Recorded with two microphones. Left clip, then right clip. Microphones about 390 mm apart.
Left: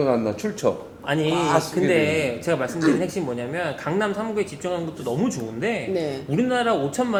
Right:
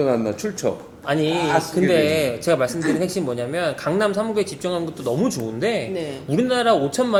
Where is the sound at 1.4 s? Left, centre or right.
Centre.